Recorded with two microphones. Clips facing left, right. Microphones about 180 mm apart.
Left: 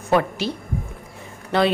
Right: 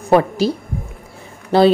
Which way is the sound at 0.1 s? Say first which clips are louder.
Right 6 dB; 35° right (ahead or behind).